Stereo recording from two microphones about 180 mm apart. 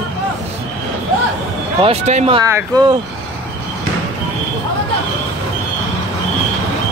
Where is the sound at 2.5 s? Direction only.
20° right (ahead or behind).